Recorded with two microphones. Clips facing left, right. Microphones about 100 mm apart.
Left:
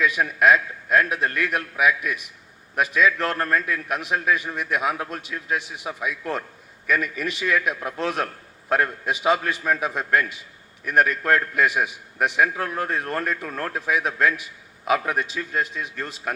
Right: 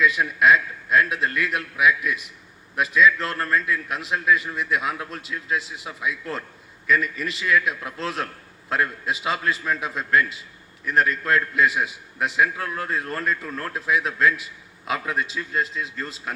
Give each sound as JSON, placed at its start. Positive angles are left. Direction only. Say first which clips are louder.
{"t": 0.0, "sound": "a man's voice", "louder": "even", "side_deg": 50}